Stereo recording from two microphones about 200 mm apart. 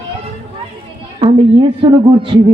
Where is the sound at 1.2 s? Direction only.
25° right (ahead or behind).